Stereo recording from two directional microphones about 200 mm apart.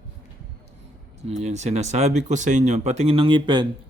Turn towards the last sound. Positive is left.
turn(degrees=-25)  # may be behind; listen again after turning